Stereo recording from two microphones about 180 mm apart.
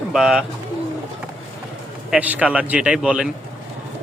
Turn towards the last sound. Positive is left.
turn(degrees=-5)  # may be behind; listen again after turning